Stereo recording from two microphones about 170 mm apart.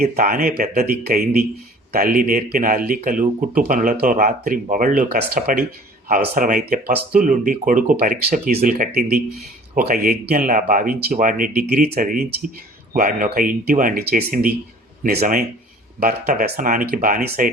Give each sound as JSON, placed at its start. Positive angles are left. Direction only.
{"t": 0.0, "sound": "speech", "side_deg": -60}